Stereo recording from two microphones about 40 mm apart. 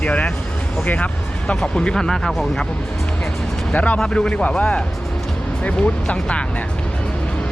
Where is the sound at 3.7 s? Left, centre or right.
Left.